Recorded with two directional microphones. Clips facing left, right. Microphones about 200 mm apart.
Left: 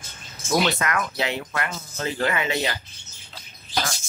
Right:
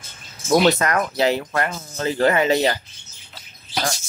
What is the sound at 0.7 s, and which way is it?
Speech, 40° right (ahead or behind).